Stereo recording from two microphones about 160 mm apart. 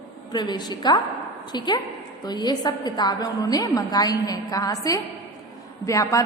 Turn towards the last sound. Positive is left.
turn(degrees=20)  # may be behind; listen again after turning